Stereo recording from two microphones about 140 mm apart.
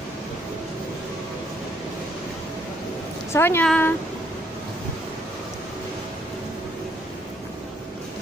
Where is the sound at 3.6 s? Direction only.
10° left (ahead or behind).